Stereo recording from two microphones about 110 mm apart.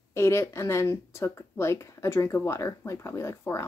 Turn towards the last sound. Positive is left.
turn(degrees=25)  # may be behind; listen again after turning